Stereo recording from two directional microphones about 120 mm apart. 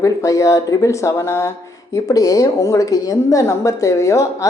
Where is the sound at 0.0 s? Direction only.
25° left (ahead or behind).